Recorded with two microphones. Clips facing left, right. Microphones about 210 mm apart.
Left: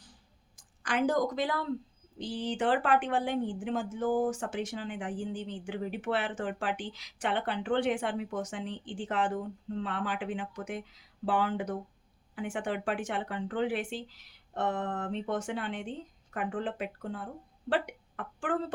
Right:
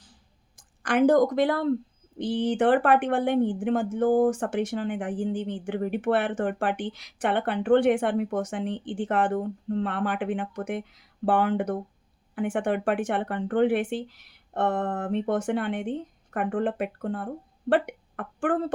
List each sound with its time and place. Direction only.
0.5 s speech: 55° right (ahead or behind)